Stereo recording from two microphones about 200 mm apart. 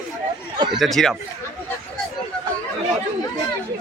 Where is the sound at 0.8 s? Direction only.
Centre (ahead or behind).